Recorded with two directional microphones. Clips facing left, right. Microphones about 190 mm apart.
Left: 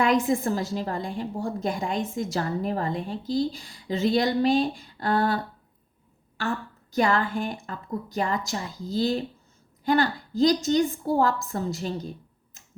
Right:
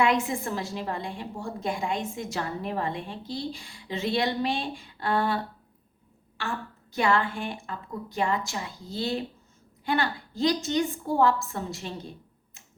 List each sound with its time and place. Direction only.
0.0 s a woman's voice: 40° left (ahead or behind)
6.9 s a woman's voice: 40° left (ahead or behind)